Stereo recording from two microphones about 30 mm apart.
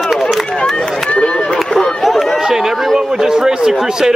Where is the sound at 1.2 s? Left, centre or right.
Left.